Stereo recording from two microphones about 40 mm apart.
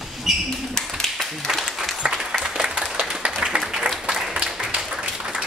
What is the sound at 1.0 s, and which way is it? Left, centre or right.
Clapping, centre.